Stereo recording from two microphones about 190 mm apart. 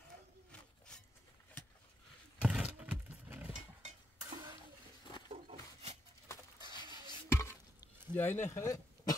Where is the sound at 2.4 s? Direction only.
5° right (ahead or behind).